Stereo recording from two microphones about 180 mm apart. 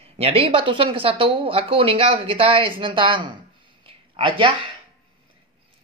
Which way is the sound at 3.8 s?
30° right (ahead or behind).